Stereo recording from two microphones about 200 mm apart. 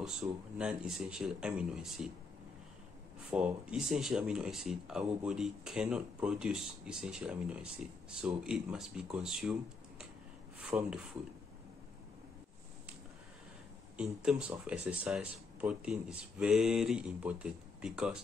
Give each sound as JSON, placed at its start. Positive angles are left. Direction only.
{"t": 0.0, "sound": "speech", "side_deg": -5}
{"t": 3.3, "sound": "speech", "side_deg": -5}
{"t": 13.9, "sound": "speech", "side_deg": -5}